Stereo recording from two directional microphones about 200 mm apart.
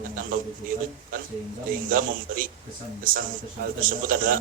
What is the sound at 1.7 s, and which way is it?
A man's voice, 45° right (ahead or behind).